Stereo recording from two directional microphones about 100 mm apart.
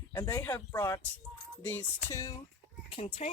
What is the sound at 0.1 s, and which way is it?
Speech, 35° left (ahead or behind).